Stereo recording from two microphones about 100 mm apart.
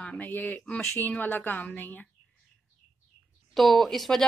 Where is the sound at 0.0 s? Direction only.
10° left (ahead or behind).